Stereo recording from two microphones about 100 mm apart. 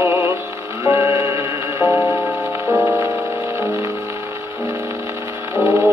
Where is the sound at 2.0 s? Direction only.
25° left (ahead or behind).